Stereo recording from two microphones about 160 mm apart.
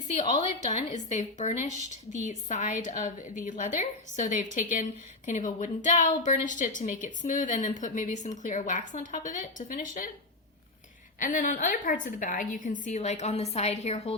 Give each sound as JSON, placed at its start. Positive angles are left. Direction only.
{"t": 0.3, "sound": "a woman's voice", "side_deg": 45}
{"t": 11.2, "sound": "a woman's voice", "side_deg": 55}